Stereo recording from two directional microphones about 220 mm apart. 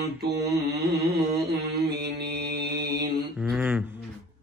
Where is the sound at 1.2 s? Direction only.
45° right (ahead or behind).